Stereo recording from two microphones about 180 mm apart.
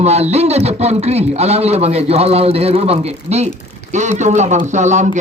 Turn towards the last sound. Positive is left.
turn(degrees=-40)  # may be behind; listen again after turning